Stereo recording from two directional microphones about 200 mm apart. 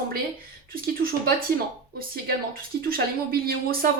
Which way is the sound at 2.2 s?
45° right (ahead or behind).